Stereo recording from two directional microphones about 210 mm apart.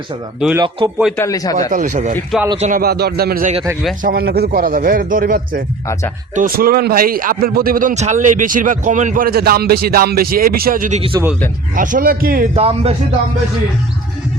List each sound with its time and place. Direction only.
0.3 s speech: 5° right (ahead or behind)
1.1 s a man's voice: 15° left (ahead or behind)
1.7 s a man's voice: 35° right (ahead or behind)
12.5 s speech: 30° right (ahead or behind)